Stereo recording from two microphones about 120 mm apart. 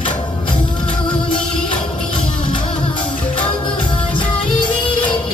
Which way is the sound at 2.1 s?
40° left (ahead or behind).